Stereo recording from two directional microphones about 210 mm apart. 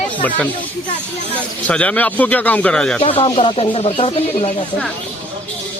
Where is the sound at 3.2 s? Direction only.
25° left (ahead or behind).